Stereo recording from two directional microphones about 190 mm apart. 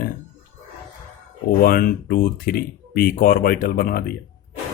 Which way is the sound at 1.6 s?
50° left (ahead or behind).